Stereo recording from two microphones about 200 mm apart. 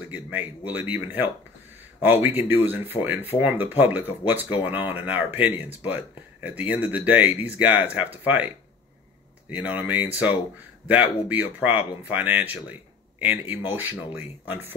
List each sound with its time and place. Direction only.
0.1 s speech: 10° right (ahead or behind)
9.5 s speech: 5° right (ahead or behind)